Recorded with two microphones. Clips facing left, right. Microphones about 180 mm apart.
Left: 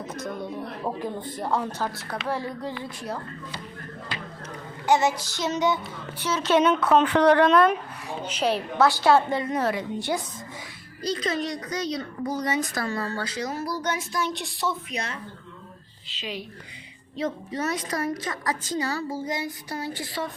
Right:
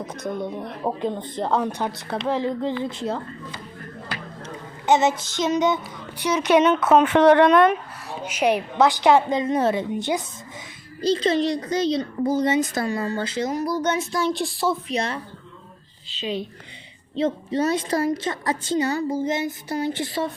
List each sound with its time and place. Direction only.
0.1 s a child's voice: 20° right (ahead or behind)
4.9 s a child's voice: 20° right (ahead or behind)
8.2 s a woman's voice: 10° right (ahead or behind)